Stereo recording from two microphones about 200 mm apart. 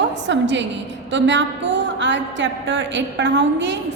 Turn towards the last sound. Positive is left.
turn(degrees=-60)  # may be behind; listen again after turning